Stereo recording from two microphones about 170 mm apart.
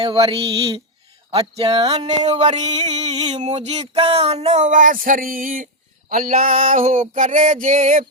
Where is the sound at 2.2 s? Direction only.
40° right (ahead or behind).